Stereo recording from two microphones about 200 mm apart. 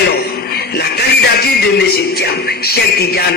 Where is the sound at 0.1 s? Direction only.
50° left (ahead or behind).